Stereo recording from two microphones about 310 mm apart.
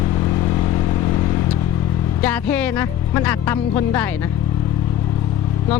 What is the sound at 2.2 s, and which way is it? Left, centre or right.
Speech, centre.